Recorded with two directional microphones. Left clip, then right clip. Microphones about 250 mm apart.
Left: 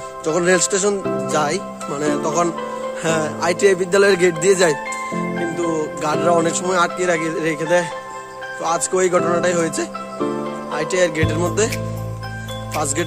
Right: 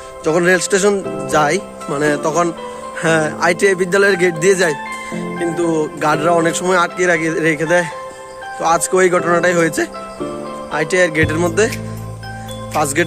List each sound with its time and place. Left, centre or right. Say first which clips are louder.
0.2 s speech: right 3 dB; centre
12.7 s speech: right 6 dB; centre